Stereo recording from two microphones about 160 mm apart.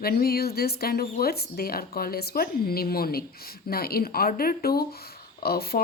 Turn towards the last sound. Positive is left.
turn(degrees=75)  # may be behind; listen again after turning